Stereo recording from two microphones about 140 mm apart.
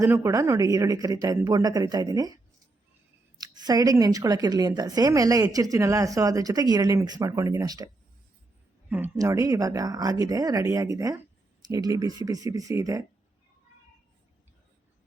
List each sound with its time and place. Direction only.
0.0 s speech: 20° right (ahead or behind)
9.1 s speech: 20° right (ahead or behind)